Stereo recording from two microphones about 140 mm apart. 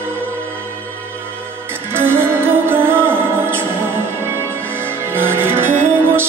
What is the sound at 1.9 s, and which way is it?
Music, 15° right (ahead or behind).